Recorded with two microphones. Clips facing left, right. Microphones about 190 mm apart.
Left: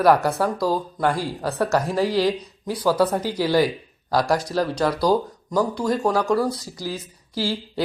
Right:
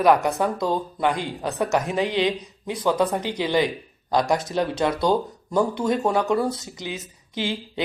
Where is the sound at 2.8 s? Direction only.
5° left (ahead or behind).